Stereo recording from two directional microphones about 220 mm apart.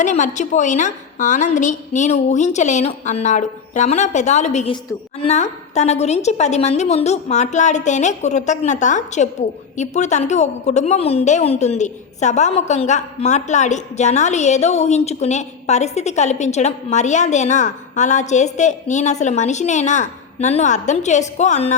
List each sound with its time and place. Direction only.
0.0 s a woman's voice: 35° left (ahead or behind)